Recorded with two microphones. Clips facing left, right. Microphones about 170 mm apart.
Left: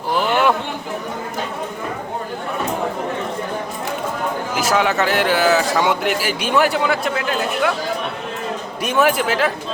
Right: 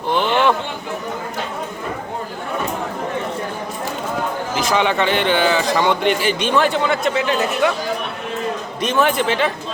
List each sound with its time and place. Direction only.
0.1 s a sound: 5° left (ahead or behind)
4.5 s a man's voice: 5° left (ahead or behind)
8.8 s speech: 10° left (ahead or behind)